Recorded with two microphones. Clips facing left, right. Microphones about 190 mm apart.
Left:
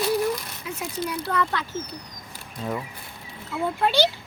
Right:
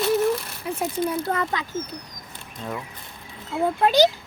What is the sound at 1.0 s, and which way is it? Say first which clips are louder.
Speech: left 2 dB; 20° right (ahead or behind).